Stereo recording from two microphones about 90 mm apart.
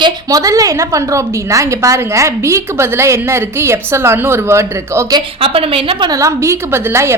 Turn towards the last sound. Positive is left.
turn(degrees=-30)  # may be behind; listen again after turning